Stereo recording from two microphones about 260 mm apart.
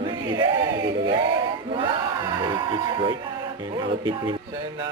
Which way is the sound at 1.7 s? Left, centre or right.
Centre.